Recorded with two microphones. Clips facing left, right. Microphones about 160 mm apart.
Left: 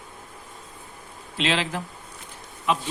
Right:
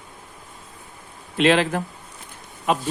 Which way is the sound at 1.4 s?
55° right (ahead or behind).